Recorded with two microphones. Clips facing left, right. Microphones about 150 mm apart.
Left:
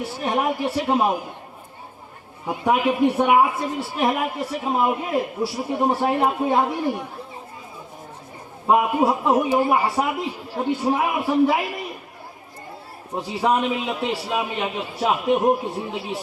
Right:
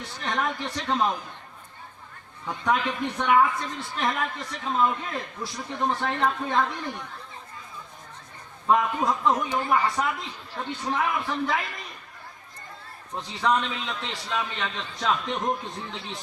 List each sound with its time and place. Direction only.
0.0 s a woman's voice: 10° left (ahead or behind)
2.5 s a woman's voice: 10° left (ahead or behind)
8.6 s a woman's voice: 15° left (ahead or behind)
13.1 s a woman's voice: 10° left (ahead or behind)